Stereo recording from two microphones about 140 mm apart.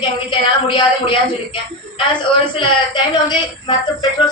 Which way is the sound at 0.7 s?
35° left (ahead or behind).